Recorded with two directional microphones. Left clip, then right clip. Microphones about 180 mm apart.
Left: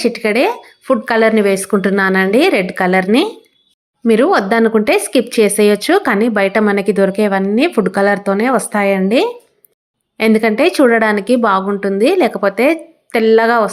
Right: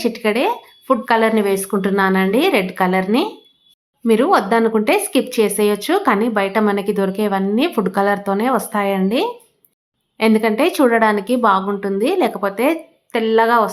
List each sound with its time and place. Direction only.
0.0 s speech: 20° left (ahead or behind)